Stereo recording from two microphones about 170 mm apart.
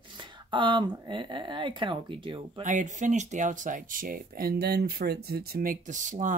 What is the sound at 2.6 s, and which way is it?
Speech, 45° right (ahead or behind).